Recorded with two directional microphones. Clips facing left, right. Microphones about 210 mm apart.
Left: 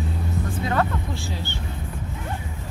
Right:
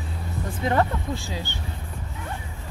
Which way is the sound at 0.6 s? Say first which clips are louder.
Right 3 dB; 20° right (ahead or behind).